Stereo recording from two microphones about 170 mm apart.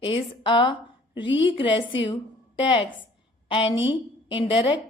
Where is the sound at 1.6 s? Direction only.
30° left (ahead or behind).